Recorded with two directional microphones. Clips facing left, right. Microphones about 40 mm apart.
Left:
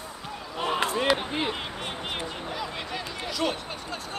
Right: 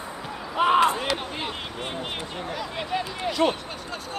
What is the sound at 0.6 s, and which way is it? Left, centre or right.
Speech, right.